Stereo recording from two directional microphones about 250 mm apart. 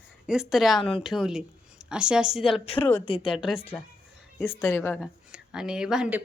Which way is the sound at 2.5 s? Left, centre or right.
Left.